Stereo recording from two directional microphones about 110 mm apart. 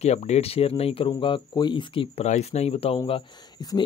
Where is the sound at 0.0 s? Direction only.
85° left; by 2.0 s 45° left (ahead or behind).